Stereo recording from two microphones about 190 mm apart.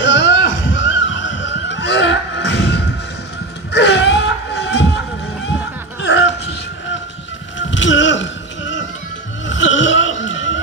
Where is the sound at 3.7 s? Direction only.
65° left (ahead or behind).